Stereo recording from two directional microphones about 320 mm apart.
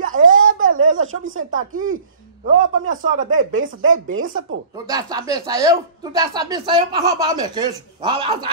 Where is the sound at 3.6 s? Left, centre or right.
Right.